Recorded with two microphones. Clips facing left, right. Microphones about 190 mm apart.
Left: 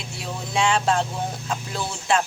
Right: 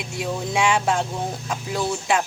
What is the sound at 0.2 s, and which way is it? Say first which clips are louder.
Speech: right 2 dB; 15° right (ahead or behind).